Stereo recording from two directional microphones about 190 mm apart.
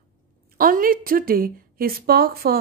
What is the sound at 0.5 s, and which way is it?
A woman's voice, 45° right (ahead or behind).